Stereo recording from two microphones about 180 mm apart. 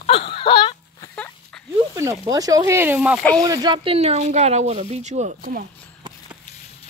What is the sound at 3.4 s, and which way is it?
Speech, 20° right (ahead or behind).